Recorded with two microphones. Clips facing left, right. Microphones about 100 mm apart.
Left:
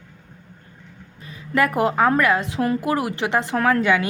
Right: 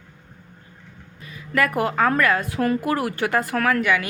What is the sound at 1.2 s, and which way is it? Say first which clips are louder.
A woman's voice: left 2 dB; 30° left (ahead or behind).